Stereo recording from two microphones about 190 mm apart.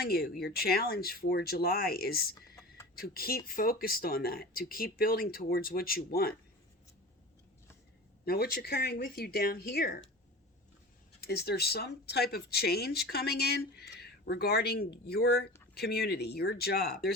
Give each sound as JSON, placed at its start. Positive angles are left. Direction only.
{"t": 0.0, "sound": "speech", "side_deg": 55}
{"t": 8.2, "sound": "speech", "side_deg": 55}
{"t": 11.2, "sound": "speech", "side_deg": 55}